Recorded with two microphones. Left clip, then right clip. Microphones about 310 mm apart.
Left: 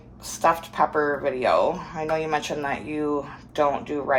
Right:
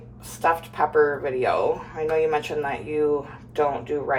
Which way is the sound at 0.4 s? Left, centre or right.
Left.